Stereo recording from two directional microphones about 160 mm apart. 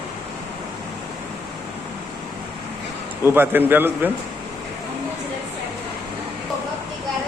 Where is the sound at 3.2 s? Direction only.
15° right (ahead or behind).